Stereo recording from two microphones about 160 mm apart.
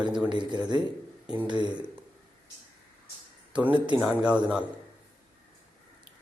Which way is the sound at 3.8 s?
5° right (ahead or behind).